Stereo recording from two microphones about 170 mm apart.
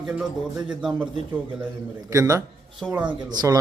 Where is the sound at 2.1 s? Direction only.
20° right (ahead or behind).